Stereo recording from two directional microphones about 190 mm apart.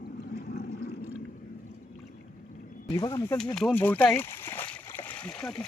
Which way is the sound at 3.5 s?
5° left (ahead or behind).